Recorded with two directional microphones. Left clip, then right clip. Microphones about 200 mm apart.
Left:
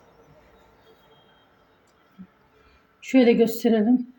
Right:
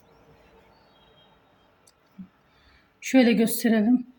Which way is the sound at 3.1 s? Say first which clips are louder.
Left 3 dB; 25° right (ahead or behind).